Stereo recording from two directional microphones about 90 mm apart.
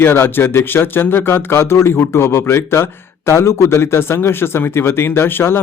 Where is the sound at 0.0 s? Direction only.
25° left (ahead or behind).